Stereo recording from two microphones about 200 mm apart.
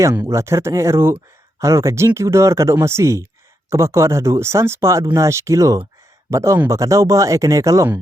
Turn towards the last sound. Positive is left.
turn(degrees=-15)  # may be behind; listen again after turning